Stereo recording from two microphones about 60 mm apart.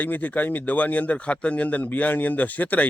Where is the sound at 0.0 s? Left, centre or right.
Left.